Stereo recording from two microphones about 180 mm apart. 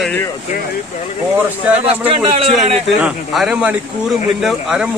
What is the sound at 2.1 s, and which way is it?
Speech, 30° right (ahead or behind).